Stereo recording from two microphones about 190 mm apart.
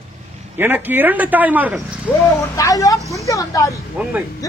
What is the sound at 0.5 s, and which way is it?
Speech, 10° right (ahead or behind).